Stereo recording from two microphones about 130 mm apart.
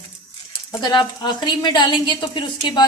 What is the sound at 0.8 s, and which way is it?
A woman's voice, 35° left (ahead or behind).